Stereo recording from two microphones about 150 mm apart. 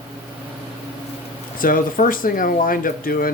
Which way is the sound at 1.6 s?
65° left (ahead or behind).